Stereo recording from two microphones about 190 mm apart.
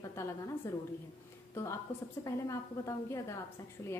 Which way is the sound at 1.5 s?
15° left (ahead or behind).